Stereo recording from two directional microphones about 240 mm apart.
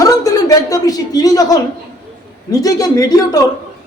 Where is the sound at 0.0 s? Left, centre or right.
Centre.